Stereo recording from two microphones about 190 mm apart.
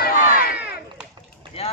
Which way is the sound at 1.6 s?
30° left (ahead or behind).